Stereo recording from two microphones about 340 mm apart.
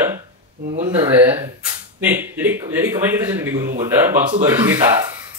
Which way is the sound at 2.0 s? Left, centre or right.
Centre.